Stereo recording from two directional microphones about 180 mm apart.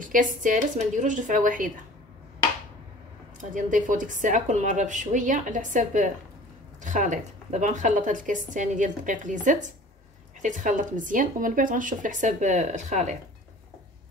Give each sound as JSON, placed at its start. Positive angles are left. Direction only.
{"t": 0.0, "sound": "a woman's voice", "side_deg": -45}
{"t": 3.3, "sound": "a woman's voice", "side_deg": -45}